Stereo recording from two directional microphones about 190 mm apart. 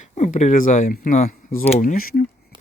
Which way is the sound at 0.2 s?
35° left (ahead or behind).